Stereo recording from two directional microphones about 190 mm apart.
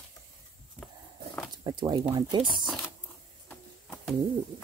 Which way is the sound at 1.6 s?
25° right (ahead or behind).